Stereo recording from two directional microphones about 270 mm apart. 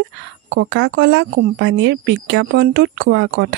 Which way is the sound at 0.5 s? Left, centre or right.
Right.